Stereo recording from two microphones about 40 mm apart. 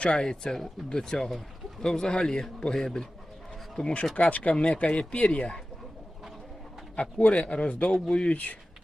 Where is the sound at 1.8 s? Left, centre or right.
Centre.